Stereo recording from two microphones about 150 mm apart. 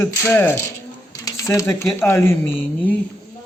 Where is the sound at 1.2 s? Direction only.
20° left (ahead or behind).